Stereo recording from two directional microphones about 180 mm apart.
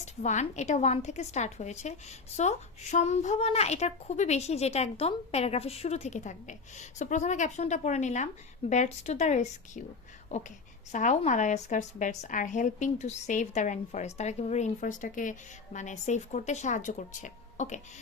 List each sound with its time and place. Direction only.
0.0 s a woman's voice: 40° left (ahead or behind)